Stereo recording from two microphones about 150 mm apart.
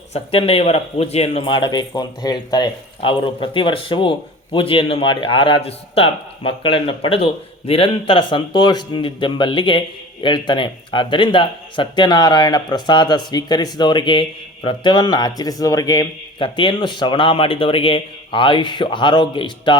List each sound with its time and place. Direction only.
0.1 s speech: 40° left (ahead or behind)